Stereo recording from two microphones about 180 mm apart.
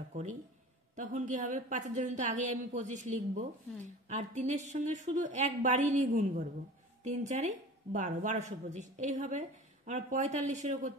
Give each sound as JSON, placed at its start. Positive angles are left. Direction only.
{"t": 0.1, "sound": "a woman's voice", "side_deg": -45}